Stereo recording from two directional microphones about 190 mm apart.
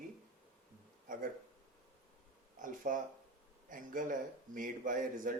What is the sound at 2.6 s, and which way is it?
Speech, 45° right (ahead or behind).